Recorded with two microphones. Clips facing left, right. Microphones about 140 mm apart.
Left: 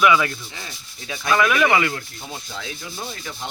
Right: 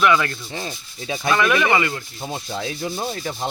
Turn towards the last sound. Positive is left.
turn(degrees=-40)  # may be behind; listen again after turning